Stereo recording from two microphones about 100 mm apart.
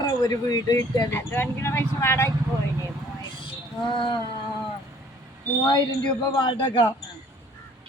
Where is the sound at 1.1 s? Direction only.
25° left (ahead or behind).